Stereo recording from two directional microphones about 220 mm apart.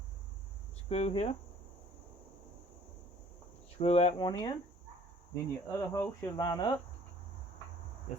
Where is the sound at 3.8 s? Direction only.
30° left (ahead or behind).